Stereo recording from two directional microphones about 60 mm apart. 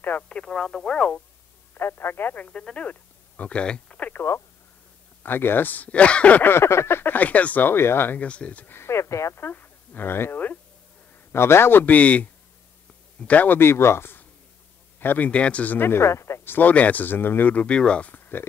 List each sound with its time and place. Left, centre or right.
0.3 s speech: centre
1.7 s speech: left
2.4 s speech: centre
4.1 s speech: left
6.4 s speech: left
8.2 s speech: left
8.7 s speech: left
9.4 s speech: left
11.8 s speech: left
13.6 s speech: left
15.9 s speech: left
16.4 s speech: left
18.1 s a sound: left